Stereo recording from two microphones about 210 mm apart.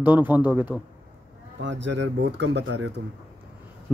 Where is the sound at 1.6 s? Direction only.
60° right (ahead or behind).